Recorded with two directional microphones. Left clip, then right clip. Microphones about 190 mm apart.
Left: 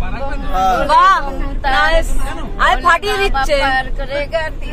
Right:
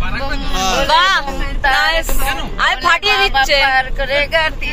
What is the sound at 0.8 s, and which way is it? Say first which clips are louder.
Music: left 2 dB; 25° left (ahead or behind).